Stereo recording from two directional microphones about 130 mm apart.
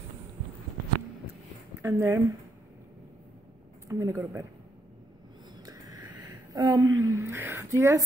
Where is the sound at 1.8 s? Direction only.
20° right (ahead or behind).